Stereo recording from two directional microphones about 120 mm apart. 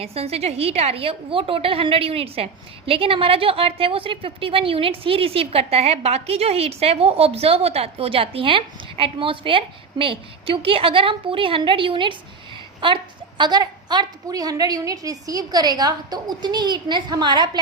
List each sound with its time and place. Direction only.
0.0 s a woman's voice: 55° right (ahead or behind); by 17.6 s 40° right (ahead or behind)